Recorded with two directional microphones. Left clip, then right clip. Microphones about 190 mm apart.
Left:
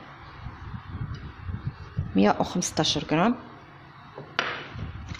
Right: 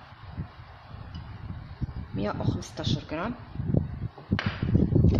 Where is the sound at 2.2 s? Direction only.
50° left (ahead or behind).